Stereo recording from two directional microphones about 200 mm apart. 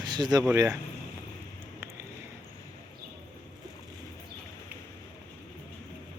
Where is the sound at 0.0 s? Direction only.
20° right (ahead or behind).